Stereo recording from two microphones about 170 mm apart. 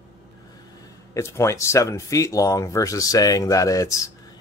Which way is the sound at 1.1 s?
15° left (ahead or behind).